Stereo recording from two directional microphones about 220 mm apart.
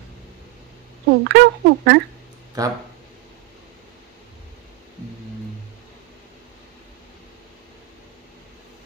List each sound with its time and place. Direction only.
1.2 s speech: 50° right (ahead or behind)
2.6 s speech: 15° right (ahead or behind)